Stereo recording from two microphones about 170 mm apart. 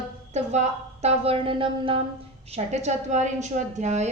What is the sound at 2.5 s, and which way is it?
A woman's voice, 40° right (ahead or behind).